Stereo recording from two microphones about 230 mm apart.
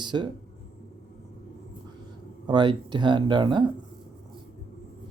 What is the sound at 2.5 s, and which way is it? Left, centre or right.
Speech, centre.